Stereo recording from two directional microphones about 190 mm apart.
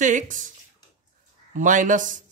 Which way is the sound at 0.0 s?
40° right (ahead or behind).